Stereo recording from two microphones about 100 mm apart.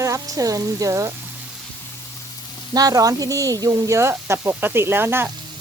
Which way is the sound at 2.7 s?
35° right (ahead or behind).